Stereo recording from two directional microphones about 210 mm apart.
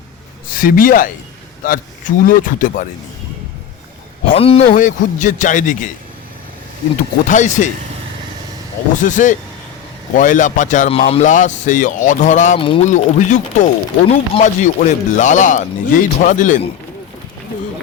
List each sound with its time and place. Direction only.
0.5 s speech: 40° left (ahead or behind)
4.3 s speech: 30° left (ahead or behind)
4.6 s speech: 40° left (ahead or behind)
7.3 s speech: 35° left (ahead or behind)
9.0 s speech: 35° left (ahead or behind)